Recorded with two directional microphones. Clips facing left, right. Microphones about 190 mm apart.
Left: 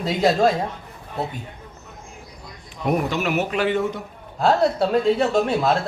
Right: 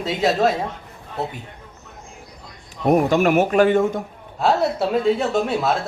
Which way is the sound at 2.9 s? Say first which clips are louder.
Right 6 dB; 45° right (ahead or behind).